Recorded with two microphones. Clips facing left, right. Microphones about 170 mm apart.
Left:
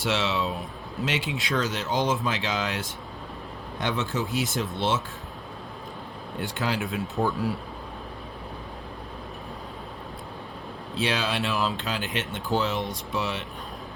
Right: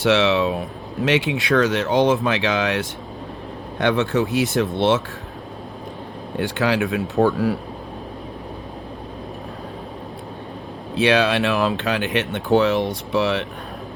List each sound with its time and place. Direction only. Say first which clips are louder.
0.0 s speech: right 9 dB; 70° right (ahead or behind)
6.4 s speech: right 9 dB; 75° right (ahead or behind)
10.9 s speech: right 10 dB; 70° right (ahead or behind)